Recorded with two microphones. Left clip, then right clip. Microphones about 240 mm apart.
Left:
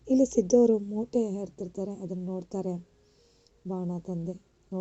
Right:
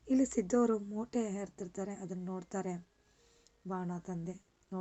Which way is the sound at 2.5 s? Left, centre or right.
Right.